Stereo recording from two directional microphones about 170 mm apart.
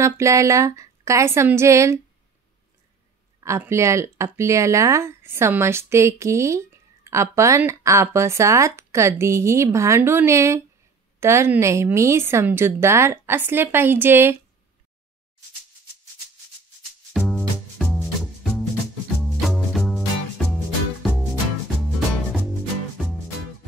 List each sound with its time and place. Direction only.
0.0 s speech: 20° right (ahead or behind)
3.4 s speech: 15° right (ahead or behind)
17.1 s music: centre (ahead or behind)